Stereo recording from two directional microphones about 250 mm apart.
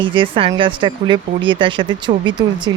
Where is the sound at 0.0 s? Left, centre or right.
Centre.